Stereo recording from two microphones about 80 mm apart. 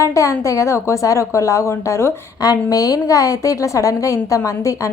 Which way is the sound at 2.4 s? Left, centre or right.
Left.